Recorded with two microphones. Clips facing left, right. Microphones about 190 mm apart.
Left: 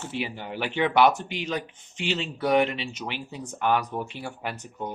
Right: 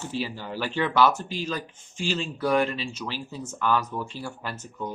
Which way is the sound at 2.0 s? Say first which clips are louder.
Even; 20° left (ahead or behind).